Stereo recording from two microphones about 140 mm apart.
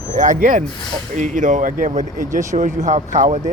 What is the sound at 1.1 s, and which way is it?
Speech, 65° right (ahead or behind).